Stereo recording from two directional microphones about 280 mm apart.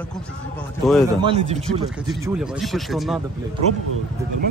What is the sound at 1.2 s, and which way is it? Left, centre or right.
Speech, centre.